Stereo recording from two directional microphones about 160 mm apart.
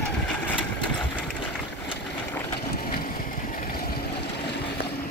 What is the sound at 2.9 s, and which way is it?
Vehicle, 65° left (ahead or behind).